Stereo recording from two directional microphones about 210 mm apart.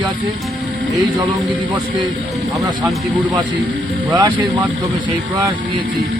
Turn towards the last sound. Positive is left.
turn(degrees=-20)  # may be behind; listen again after turning